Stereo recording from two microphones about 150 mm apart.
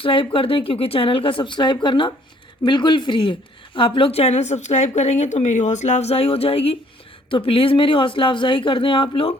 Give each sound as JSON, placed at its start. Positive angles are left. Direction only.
{"t": 0.0, "sound": "a woman's voice", "side_deg": 35}